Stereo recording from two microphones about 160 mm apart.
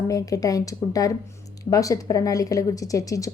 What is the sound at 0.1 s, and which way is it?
A woman's voice, 20° left (ahead or behind).